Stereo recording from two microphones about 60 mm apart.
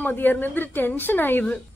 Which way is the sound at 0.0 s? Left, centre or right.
Left.